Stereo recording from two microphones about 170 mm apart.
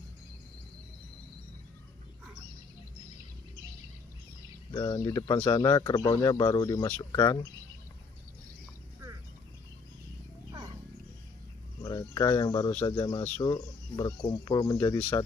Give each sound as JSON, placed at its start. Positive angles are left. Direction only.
{"t": 4.7, "sound": "speech", "side_deg": 20}
{"t": 11.8, "sound": "cricket", "side_deg": 25}
{"t": 12.8, "sound": "speech", "side_deg": 25}